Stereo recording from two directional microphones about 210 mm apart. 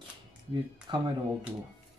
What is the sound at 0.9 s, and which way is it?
Speech, 25° right (ahead or behind).